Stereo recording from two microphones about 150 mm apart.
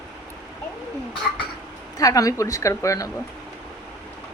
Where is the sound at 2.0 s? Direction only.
25° left (ahead or behind).